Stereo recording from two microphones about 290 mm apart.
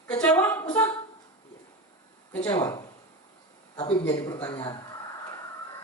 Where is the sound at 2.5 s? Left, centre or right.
Centre.